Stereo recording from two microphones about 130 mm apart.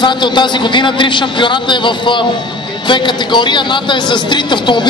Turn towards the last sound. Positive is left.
turn(degrees=35)  # may be behind; listen again after turning